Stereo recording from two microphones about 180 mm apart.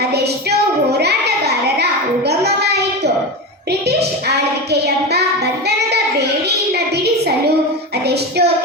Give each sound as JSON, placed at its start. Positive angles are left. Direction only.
{"t": 0.9, "sound": "child singing", "side_deg": -65}
{"t": 6.7, "sound": "a sound", "side_deg": -65}
{"t": 8.0, "sound": "child singing", "side_deg": -65}